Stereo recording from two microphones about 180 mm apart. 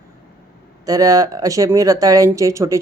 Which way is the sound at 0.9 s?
20° right (ahead or behind).